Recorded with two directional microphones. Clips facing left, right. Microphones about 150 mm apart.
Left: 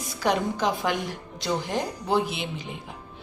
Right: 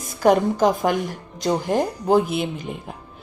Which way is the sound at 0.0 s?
45° right (ahead or behind).